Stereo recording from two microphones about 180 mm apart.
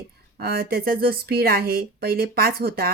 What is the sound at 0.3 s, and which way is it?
Speech, 55° right (ahead or behind).